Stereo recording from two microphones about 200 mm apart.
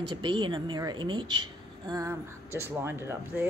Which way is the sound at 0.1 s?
25° right (ahead or behind).